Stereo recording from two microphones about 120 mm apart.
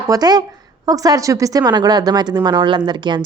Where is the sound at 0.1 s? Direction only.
35° right (ahead or behind).